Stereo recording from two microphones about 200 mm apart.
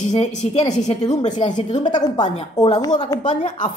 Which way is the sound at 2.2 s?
35° left (ahead or behind).